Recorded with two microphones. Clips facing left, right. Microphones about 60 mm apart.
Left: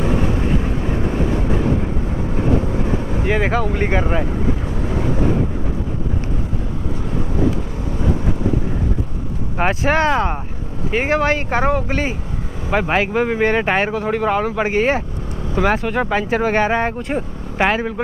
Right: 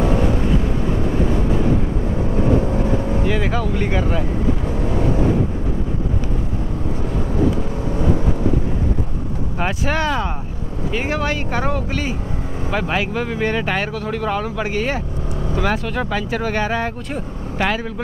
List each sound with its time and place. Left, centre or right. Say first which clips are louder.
3.3 s speech: left 6 dB; left
9.6 s speech: left 5 dB; left